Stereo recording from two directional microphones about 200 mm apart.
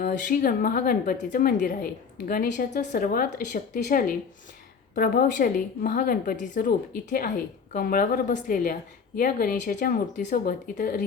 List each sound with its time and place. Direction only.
0.0 s a woman's voice: 45° left (ahead or behind)